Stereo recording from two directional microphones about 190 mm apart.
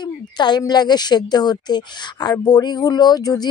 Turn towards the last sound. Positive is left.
turn(degrees=20)  # may be behind; listen again after turning